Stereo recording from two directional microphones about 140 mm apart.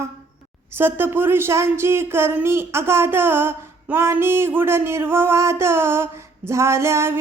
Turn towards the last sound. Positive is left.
turn(degrees=-20)  # may be behind; listen again after turning